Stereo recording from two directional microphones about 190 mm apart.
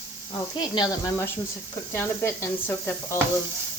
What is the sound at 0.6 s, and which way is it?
Speech, 20° left (ahead or behind).